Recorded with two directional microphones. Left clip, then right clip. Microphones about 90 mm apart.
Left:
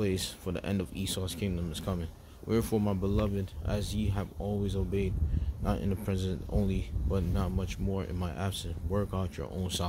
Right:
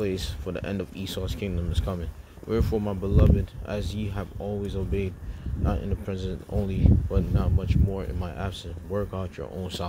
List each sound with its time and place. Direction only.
0.0 s speech: 25° left (ahead or behind)
1.2 s speech: 10° left (ahead or behind)
2.4 s speech: 30° left (ahead or behind)
3.3 s speech: 20° left (ahead or behind)
5.9 s speech: 40° left (ahead or behind); by 9.8 s 20° left (ahead or behind)